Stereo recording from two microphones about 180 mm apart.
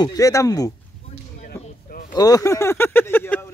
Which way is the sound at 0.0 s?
20° left (ahead or behind).